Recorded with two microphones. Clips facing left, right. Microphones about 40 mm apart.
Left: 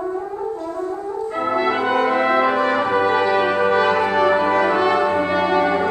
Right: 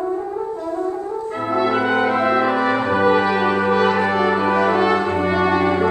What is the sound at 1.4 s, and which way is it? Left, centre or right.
Brass instrument, centre.